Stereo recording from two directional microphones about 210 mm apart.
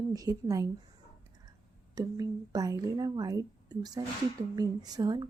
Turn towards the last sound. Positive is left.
turn(degrees=-20)  # may be behind; listen again after turning